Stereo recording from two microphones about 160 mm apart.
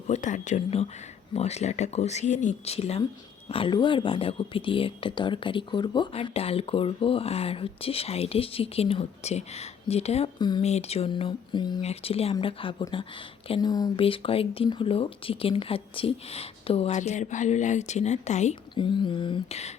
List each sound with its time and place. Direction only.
0.1 s speech: 50° left (ahead or behind)
10.3 s speech: 25° left (ahead or behind)
10.6 s speech: 40° left (ahead or behind)
11.8 s speech: 40° left (ahead or behind)
14.0 s speech: 35° left (ahead or behind)
18.7 s speech: 30° left (ahead or behind)